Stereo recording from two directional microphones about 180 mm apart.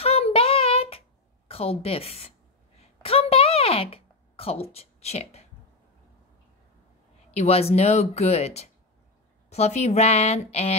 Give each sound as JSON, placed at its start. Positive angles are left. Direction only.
{"t": 0.0, "sound": "child singing", "side_deg": 35}
{"t": 1.5, "sound": "speech", "side_deg": 30}
{"t": 2.8, "sound": "a sound", "side_deg": 35}
{"t": 7.3, "sound": "speech", "side_deg": 35}